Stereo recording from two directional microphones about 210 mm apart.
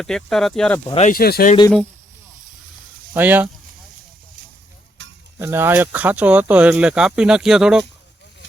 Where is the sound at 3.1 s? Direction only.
10° right (ahead or behind).